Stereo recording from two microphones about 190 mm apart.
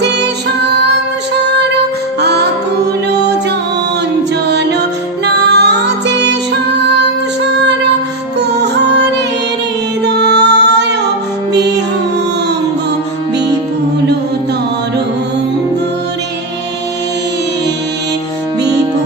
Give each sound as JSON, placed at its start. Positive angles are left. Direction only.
{"t": 4.4, "sound": "music", "side_deg": -65}
{"t": 8.4, "sound": "music", "side_deg": -60}
{"t": 10.0, "sound": "music", "side_deg": -65}